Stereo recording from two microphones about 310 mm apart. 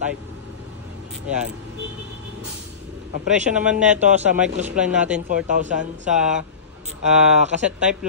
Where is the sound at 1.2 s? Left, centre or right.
Centre.